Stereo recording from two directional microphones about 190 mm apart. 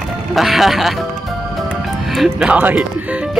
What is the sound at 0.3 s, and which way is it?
Speech, centre (ahead or behind).